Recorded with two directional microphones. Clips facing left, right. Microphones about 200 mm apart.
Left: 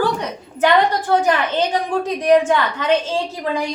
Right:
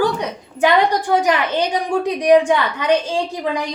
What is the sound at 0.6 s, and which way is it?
A woman's voice, 10° right (ahead or behind).